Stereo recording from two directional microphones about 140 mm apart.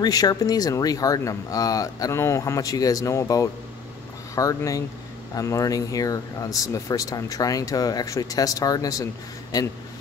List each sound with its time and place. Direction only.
0.0 s speech: 30° left (ahead or behind)